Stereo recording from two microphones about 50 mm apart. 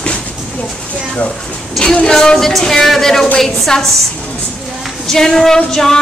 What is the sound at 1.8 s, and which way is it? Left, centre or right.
Speech, centre.